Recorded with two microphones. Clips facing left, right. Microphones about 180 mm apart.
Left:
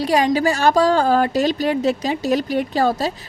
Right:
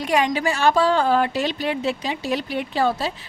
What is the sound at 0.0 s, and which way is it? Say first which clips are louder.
A woman's voice: left 4 dB; 35° left (ahead or behind).